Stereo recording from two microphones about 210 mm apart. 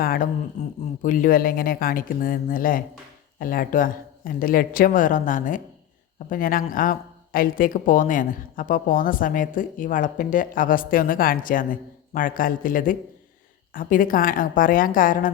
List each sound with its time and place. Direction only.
0.0 s speech: 45° left (ahead or behind)